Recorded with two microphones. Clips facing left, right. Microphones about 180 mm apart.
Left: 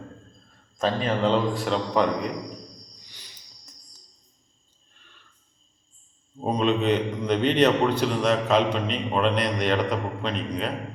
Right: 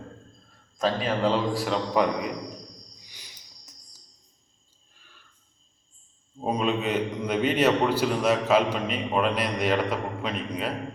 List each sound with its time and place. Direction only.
0.8 s a man's voice: 5° right (ahead or behind)
6.4 s a man's voice: 5° right (ahead or behind)